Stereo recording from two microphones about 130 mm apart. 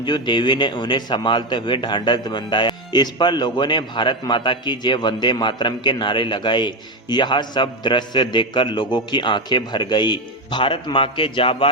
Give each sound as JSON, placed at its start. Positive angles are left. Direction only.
{"t": 0.0, "sound": "a man's voice", "side_deg": 35}